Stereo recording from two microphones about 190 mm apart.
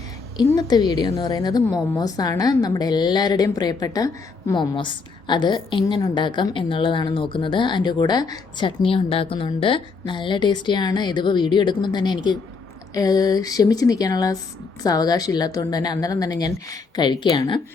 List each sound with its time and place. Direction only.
0.3 s a woman's voice: 20° left (ahead or behind)